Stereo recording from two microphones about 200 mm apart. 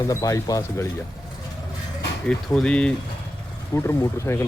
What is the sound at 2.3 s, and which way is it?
Speech, 5° left (ahead or behind).